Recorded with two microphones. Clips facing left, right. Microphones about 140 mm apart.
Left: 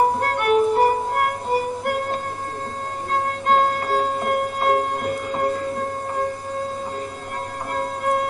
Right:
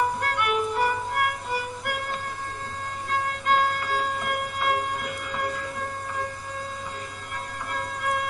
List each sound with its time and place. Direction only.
0.0 s music: 40° left (ahead or behind)
7.7 s music: 40° left (ahead or behind)